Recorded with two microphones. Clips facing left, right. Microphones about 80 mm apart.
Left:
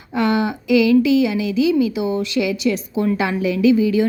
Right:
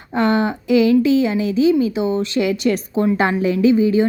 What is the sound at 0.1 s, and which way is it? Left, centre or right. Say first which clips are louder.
A woman's voice: right 1 dB; right.